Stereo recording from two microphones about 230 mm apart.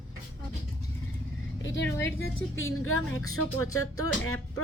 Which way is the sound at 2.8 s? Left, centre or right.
Left.